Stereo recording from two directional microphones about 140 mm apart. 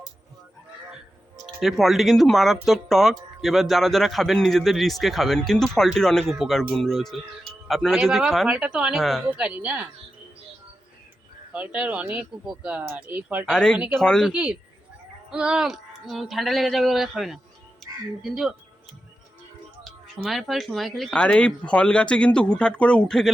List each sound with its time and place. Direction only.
1.6 s speech: centre (ahead or behind)
9.4 s speech: 10° right (ahead or behind)
11.5 s speech: 10° right (ahead or behind)
13.5 s speech: 5° left (ahead or behind)
13.7 s speech: 10° right (ahead or behind)
14.0 s speech: 5° left (ahead or behind)
14.3 s speech: 10° right (ahead or behind)
17.8 s music: centre (ahead or behind)
18.2 s speech: centre (ahead or behind)
19.8 s speech: centre (ahead or behind)